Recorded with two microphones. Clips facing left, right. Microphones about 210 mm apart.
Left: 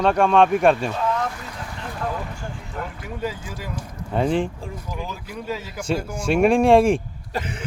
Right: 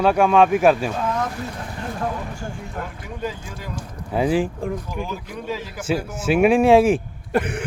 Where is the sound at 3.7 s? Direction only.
5° right (ahead or behind).